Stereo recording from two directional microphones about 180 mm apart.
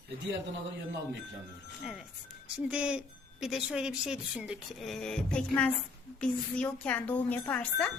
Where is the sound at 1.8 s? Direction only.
5° right (ahead or behind).